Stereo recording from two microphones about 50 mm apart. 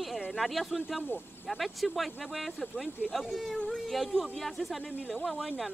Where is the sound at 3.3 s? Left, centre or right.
Centre.